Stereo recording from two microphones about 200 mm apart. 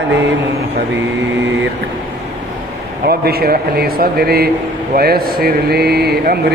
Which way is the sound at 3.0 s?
50° right (ahead or behind).